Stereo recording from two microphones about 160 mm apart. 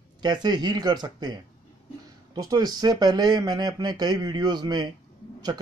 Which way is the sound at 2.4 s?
25° right (ahead or behind).